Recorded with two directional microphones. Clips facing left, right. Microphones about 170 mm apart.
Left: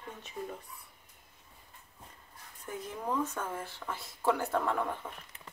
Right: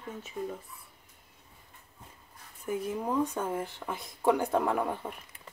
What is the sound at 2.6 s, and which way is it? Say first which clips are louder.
Speech: right 6 dB; 10° right (ahead or behind).